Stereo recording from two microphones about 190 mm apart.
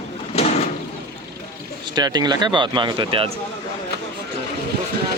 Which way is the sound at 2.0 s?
20° right (ahead or behind).